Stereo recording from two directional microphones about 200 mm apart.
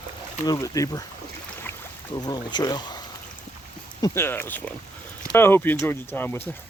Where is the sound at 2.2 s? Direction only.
20° left (ahead or behind).